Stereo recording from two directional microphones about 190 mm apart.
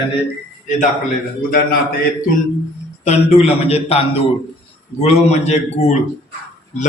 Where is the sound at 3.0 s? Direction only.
35° left (ahead or behind).